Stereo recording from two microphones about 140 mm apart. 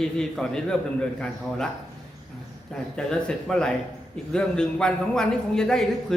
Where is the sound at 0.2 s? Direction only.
5° left (ahead or behind).